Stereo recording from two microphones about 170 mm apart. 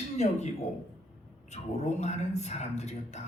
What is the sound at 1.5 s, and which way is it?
A man's voice, 40° left (ahead or behind).